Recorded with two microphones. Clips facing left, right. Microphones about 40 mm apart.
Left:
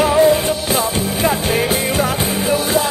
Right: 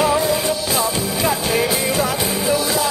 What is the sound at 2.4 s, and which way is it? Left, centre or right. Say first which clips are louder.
Music: left 3 dB; left.